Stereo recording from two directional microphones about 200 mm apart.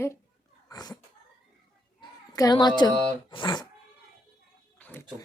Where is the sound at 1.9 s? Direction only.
20° left (ahead or behind).